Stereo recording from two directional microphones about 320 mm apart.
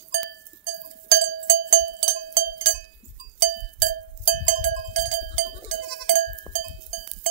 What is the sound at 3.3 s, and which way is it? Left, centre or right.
Music, right.